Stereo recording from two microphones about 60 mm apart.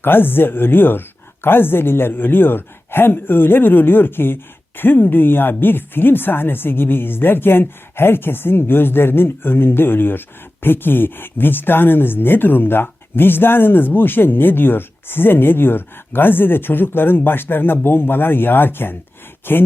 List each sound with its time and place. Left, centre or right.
0.0 s speech: left